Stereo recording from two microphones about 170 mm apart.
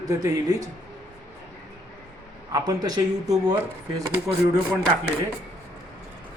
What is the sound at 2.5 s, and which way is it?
Speech, 20° right (ahead or behind).